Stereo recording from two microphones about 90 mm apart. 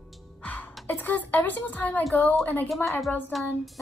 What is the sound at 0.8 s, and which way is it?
A woman's voice, 20° left (ahead or behind).